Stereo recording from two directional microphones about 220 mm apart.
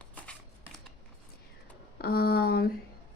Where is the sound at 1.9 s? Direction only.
45° left (ahead or behind).